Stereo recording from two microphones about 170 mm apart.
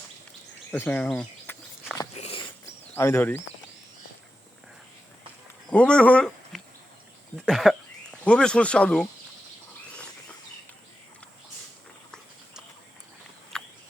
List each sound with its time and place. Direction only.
0.7 s bird: 10° left (ahead or behind)
2.1 s biting: 40° left (ahead or behind)
2.9 s speech: 15° left (ahead or behind)
5.6 s speech: 5° left (ahead or behind)
13.5 s a sound: 5° left (ahead or behind)